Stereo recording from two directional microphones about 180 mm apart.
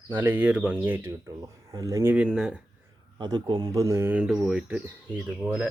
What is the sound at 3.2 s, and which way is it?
Speech, 25° right (ahead or behind).